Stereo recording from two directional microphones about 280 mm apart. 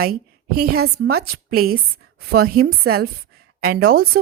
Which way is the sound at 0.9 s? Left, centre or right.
Right.